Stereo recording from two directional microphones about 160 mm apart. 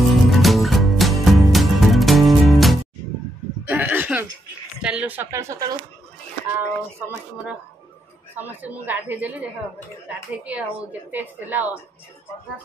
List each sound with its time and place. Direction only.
0.1 s music: centre (ahead or behind)
3.6 s a sound: 10° right (ahead or behind)
4.8 s a woman's voice: 10° right (ahead or behind)